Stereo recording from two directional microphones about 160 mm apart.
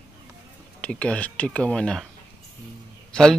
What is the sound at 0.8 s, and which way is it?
Speech, 5° left (ahead or behind).